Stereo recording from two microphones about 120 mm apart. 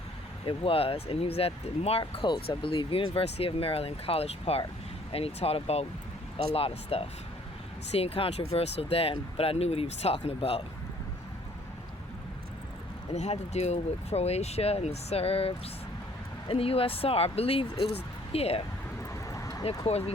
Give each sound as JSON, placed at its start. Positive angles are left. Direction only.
{"t": 0.4, "sound": "speech", "side_deg": 50}
{"t": 13.1, "sound": "speech", "side_deg": 65}
{"t": 19.3, "sound": "a sound", "side_deg": 25}
{"t": 19.8, "sound": "speech", "side_deg": 60}